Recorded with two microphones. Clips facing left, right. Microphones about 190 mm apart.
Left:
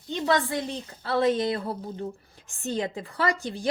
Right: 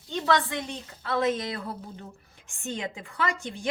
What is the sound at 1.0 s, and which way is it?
A woman's voice, 30° left (ahead or behind).